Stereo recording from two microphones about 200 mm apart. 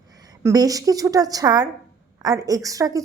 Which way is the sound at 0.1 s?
20° right (ahead or behind).